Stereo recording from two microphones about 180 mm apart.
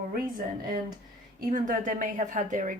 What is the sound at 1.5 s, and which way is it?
Speech, 45° right (ahead or behind).